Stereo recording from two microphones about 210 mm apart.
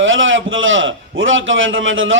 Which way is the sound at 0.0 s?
65° right (ahead or behind).